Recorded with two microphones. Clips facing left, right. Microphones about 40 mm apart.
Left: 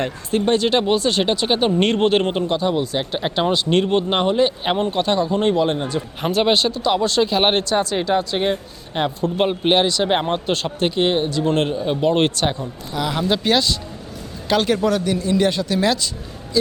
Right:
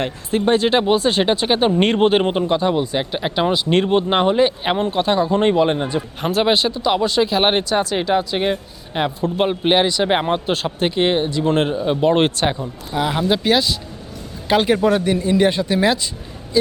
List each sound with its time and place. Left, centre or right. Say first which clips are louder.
0.0 s speech: right 1 dB; centre
3.1 s speech: right 1 dB; centre
5.3 s speech: right 2 dB; right
6.2 s speech: even; centre
14.5 s speech: right 2 dB; centre